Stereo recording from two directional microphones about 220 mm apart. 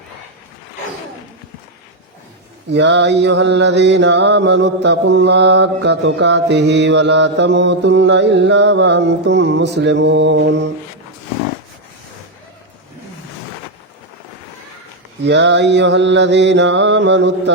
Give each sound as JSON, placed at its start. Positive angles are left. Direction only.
{"t": 2.6, "sound": "mantra", "side_deg": -55}
{"t": 15.2, "sound": "mantra", "side_deg": -50}